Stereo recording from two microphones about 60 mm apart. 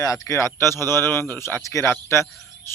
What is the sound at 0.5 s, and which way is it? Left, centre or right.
Speech, left.